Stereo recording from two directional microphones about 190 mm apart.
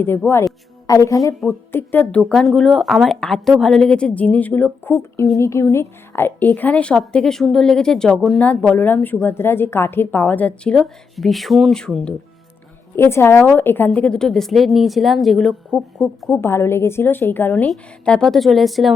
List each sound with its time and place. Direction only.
0.0 s a woman's voice: 10° left (ahead or behind)